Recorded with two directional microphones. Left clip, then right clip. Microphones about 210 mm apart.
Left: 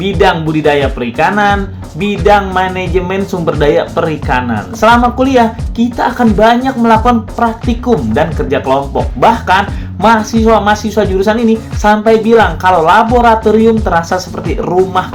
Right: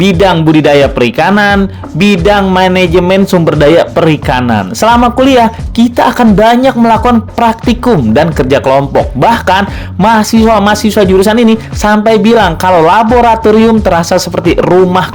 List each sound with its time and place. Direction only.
0.0 s a man's voice: 50° right (ahead or behind)